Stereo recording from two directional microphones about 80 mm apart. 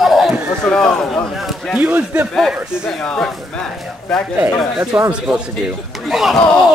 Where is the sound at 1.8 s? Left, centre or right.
Centre.